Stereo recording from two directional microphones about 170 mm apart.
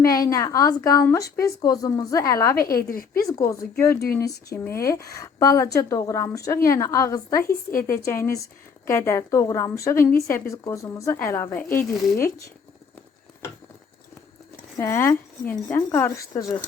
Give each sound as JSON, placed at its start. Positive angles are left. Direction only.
{"t": 0.0, "sound": "speech", "side_deg": 20}
{"t": 2.6, "sound": "a woman's voice", "side_deg": 60}
{"t": 3.2, "sound": "a woman's voice", "side_deg": 20}
{"t": 14.8, "sound": "a woman's voice", "side_deg": 15}